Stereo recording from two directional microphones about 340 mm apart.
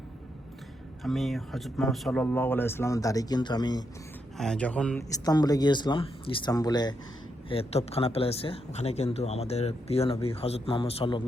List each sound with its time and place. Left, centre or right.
1.0 s speech: centre